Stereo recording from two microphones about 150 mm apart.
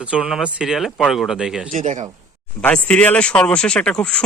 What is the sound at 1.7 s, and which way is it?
Speech, 60° right (ahead or behind).